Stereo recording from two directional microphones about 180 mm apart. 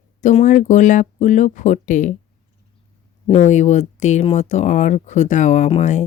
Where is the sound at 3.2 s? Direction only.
40° left (ahead or behind).